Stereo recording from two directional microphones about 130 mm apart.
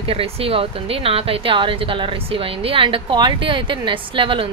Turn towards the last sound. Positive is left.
turn(degrees=-40)  # may be behind; listen again after turning